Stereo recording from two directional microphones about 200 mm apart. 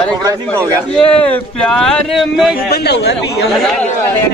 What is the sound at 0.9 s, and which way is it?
Speech, 5° left (ahead or behind).